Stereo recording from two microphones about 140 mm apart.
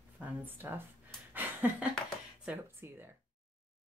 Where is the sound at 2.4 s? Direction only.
10° right (ahead or behind).